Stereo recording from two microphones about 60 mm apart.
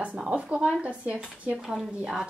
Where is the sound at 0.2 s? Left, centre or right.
Centre.